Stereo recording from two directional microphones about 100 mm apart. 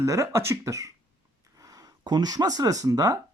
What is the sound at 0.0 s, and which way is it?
Speech, 30° right (ahead or behind).